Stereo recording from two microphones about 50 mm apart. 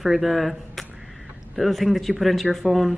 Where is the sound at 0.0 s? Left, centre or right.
Centre.